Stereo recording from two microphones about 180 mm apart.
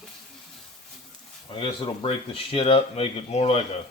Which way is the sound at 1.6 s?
30° left (ahead or behind).